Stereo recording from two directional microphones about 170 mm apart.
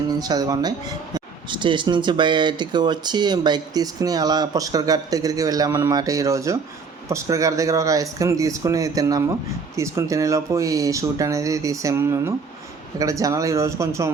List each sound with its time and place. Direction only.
0.1 s speech: 20° right (ahead or behind)